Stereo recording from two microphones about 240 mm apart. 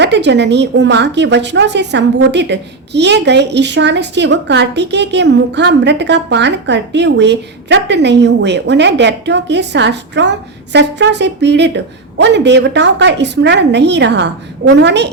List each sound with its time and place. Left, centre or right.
0.0 s a woman's voice: right